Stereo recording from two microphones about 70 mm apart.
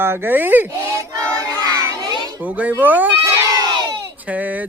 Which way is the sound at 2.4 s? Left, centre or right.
Right.